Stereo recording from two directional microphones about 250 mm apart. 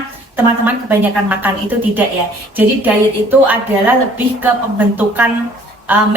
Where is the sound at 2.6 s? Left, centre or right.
Centre.